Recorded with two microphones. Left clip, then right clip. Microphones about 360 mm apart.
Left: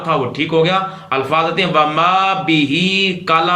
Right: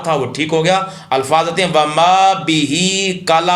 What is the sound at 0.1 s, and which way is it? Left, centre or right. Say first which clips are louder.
A man's voice: even; centre.